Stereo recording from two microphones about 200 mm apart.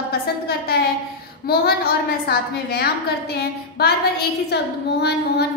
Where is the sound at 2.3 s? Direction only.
50° left (ahead or behind).